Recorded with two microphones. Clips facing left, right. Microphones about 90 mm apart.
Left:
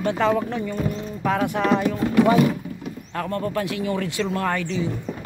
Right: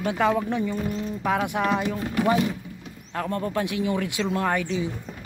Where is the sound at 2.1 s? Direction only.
75° left (ahead or behind); by 2.6 s 60° left (ahead or behind).